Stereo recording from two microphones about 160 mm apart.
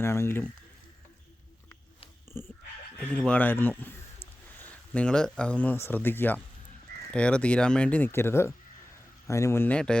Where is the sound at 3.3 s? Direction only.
10° left (ahead or behind).